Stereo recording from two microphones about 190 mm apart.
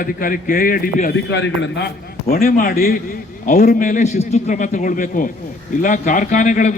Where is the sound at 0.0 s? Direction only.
45° left (ahead or behind).